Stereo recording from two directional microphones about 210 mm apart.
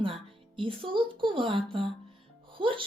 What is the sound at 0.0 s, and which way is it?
Speech, 25° right (ahead or behind).